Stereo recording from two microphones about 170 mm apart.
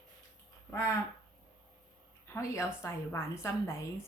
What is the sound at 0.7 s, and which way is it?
Speech, 20° left (ahead or behind).